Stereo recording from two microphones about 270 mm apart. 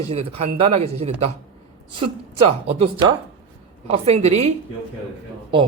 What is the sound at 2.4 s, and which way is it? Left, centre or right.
A man's voice, centre.